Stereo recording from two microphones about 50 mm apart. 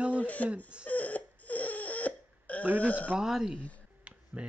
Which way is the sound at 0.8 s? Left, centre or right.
Left.